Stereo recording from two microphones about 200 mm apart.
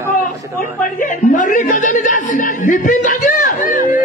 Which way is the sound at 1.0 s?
40° left (ahead or behind).